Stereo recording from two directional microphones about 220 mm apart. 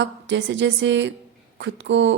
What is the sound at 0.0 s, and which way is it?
A woman's voice, 55° right (ahead or behind).